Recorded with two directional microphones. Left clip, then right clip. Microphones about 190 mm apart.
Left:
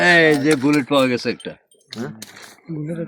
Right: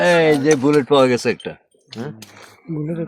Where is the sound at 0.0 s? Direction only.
15° right (ahead or behind).